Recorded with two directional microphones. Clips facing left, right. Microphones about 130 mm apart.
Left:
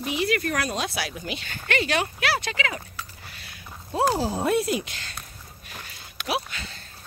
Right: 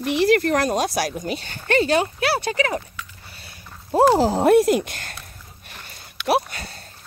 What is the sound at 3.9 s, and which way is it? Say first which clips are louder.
Speech: right 8 dB; 60° right (ahead or behind).